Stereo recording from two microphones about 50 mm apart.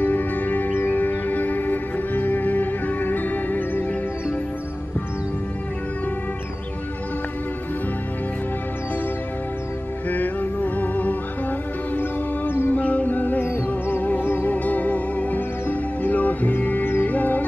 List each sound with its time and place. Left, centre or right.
0.0 s music: left
10.0 s music: left
11.9 s music: left
12.7 s music: left
14.0 s music: left